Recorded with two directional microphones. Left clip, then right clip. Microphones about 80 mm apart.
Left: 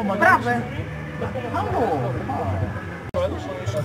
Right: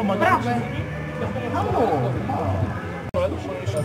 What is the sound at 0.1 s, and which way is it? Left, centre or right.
Speech, centre.